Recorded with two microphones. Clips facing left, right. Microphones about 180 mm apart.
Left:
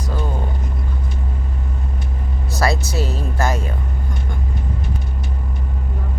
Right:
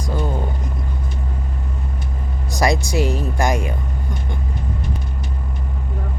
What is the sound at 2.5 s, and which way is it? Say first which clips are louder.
Speech: right 2 dB; 15° right (ahead or behind).